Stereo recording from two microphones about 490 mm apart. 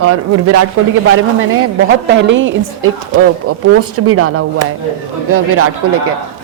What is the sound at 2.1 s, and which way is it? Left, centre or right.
A woman's voice, right.